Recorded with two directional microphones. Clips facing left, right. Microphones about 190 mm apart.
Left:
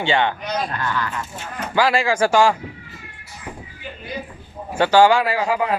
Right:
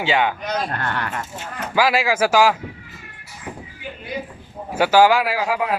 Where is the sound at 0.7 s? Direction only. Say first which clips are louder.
Left 1 dB; 60° right (ahead or behind).